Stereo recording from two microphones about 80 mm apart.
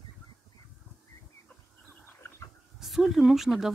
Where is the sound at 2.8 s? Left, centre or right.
Centre.